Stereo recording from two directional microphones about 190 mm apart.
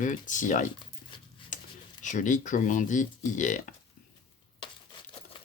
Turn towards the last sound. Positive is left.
turn(degrees=40)  # may be behind; listen again after turning